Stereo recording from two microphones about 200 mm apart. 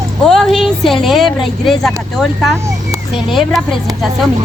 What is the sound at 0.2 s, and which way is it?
A child's voice, centre (ahead or behind).